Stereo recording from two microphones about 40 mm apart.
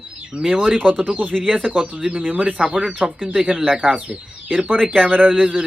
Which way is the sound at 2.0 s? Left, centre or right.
Right.